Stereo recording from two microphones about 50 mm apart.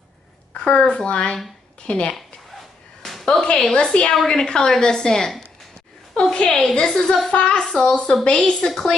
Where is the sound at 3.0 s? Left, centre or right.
Centre.